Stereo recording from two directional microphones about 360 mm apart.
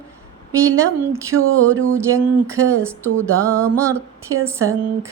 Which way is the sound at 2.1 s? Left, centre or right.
Centre.